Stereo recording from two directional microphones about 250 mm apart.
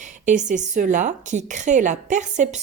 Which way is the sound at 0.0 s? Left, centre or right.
Right.